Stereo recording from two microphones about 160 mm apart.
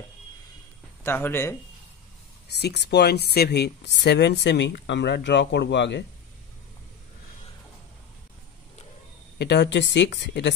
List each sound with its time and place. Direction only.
1.0 s speech: 15° left (ahead or behind)
2.4 s speech: 90° left
9.4 s speech: 90° left